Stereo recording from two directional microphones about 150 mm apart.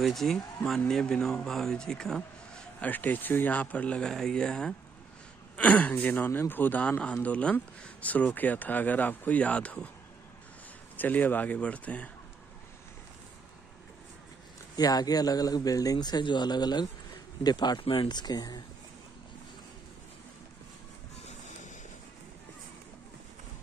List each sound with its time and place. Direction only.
0.0 s speech: centre (ahead or behind)
11.0 s speech: 10° left (ahead or behind)
14.8 s speech: 25° left (ahead or behind)
21.3 s vehicle: 55° left (ahead or behind)